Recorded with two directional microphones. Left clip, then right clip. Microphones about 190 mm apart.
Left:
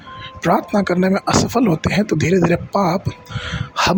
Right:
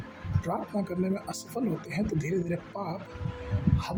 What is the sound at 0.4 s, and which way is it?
Speech, 45° left (ahead or behind).